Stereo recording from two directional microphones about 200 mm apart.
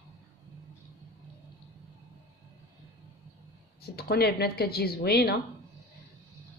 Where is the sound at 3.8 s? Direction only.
50° left (ahead or behind).